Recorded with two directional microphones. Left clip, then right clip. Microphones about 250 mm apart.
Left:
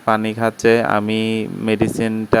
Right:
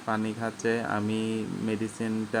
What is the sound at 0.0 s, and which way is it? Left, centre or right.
Speech, left.